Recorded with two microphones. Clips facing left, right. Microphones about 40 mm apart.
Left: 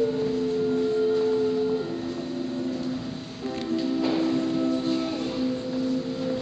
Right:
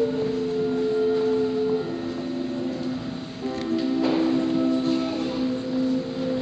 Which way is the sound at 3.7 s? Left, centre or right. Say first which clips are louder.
Right 2 dB; centre.